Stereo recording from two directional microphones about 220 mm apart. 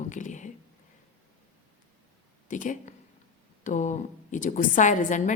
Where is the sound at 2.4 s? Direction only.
35° left (ahead or behind).